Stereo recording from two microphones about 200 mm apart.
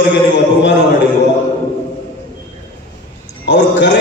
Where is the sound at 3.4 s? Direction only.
60° left (ahead or behind).